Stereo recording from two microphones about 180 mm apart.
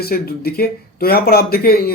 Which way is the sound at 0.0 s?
60° left (ahead or behind).